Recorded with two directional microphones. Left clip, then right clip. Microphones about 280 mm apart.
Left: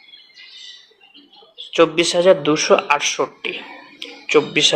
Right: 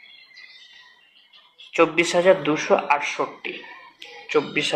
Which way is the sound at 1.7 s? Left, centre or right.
Centre.